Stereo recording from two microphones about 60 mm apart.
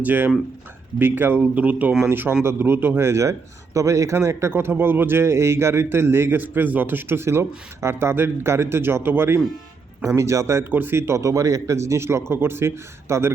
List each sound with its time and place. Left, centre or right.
0.0 s speech: right
1.4 s speech: right
2.0 s speech: right
3.8 s speech: right
10.2 s speech: right
10.7 s speech: right
10.9 s speech: right